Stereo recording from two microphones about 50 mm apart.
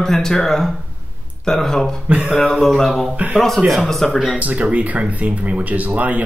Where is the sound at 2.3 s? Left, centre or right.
Centre.